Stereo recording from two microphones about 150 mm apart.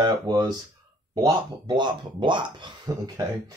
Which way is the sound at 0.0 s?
25° right (ahead or behind).